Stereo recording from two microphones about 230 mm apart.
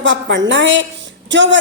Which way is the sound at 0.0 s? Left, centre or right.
Right.